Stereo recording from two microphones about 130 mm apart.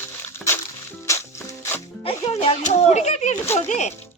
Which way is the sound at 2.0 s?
45° left (ahead or behind).